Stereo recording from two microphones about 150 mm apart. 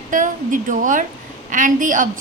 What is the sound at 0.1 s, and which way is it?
A woman's voice, 60° right (ahead or behind).